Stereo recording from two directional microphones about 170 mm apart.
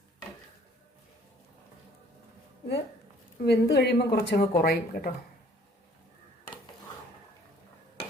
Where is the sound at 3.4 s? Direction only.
80° left; by 5.1 s 60° left (ahead or behind).